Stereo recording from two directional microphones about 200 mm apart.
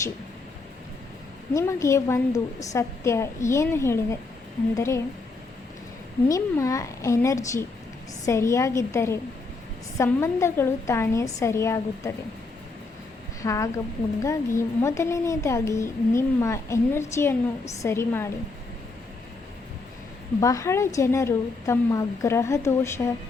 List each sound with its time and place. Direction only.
1.5 s a woman's voice: 15° left (ahead or behind)
6.2 s a woman's voice: 15° left (ahead or behind)
13.4 s a woman's voice: 15° left (ahead or behind)
20.4 s a woman's voice: 15° left (ahead or behind)